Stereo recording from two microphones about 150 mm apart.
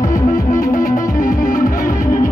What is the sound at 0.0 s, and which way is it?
Music, 60° left (ahead or behind).